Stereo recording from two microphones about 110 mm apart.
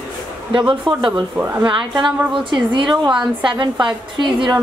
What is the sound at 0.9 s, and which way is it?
Speech, 45° right (ahead or behind).